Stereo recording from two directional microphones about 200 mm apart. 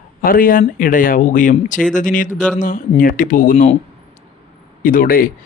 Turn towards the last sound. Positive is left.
turn(degrees=45)  # may be behind; listen again after turning